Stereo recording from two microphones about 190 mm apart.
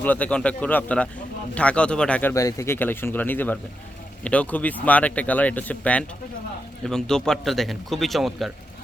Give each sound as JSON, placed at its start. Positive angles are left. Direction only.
{"t": 0.0, "sound": "a man's voice", "side_deg": 10}
{"t": 2.3, "sound": "a man's voice", "side_deg": 15}